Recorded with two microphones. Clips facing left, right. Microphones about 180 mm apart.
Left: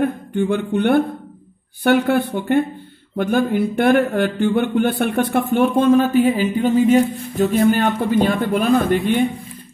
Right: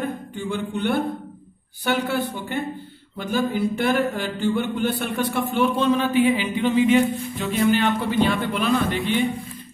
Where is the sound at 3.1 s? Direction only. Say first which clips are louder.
Left 6 dB; 55° left (ahead or behind).